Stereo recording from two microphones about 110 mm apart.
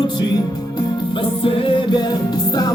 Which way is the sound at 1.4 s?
55° left (ahead or behind).